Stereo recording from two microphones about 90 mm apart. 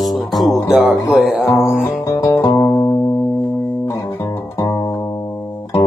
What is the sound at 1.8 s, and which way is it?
Music, 35° left (ahead or behind).